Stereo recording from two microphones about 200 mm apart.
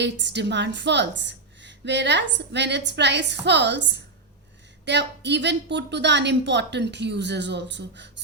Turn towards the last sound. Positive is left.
turn(degrees=-60)  # may be behind; listen again after turning